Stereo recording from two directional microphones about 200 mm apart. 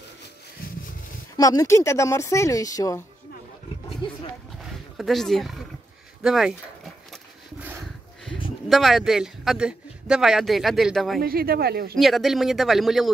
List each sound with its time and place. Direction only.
1.3 s speech: 15° left (ahead or behind)
4.0 s roaring cats: 25° left (ahead or behind)
4.9 s speech: centre (ahead or behind)
8.6 s speech: centre (ahead or behind)
11.1 s speech: 50° right (ahead or behind)
12.0 s speech: centre (ahead or behind)